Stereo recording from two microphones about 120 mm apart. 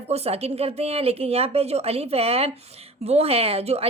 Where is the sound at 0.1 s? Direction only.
60° right (ahead or behind).